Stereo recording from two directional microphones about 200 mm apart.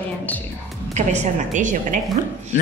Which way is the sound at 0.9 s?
35° right (ahead or behind).